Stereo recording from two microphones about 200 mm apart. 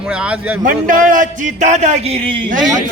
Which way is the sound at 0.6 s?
40° right (ahead or behind).